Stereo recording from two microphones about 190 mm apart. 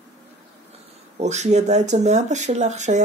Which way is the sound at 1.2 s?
35° right (ahead or behind).